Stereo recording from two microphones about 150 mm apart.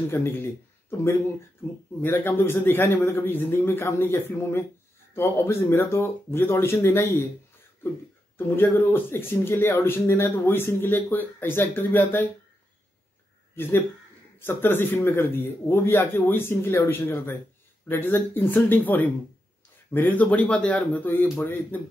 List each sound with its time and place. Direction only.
0.1 s speech: 15° left (ahead or behind)
8.4 s speech: 15° left (ahead or behind)
13.6 s speech: 15° left (ahead or behind)